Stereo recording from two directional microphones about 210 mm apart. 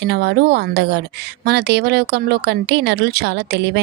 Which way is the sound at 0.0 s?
55° right (ahead or behind).